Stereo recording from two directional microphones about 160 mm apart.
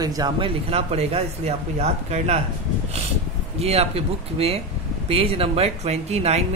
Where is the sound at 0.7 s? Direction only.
40° right (ahead or behind).